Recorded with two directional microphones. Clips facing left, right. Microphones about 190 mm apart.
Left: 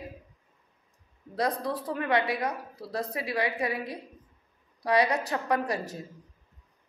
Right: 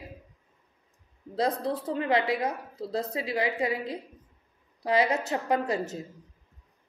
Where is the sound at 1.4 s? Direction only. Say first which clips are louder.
Right 2 dB; 25° right (ahead or behind).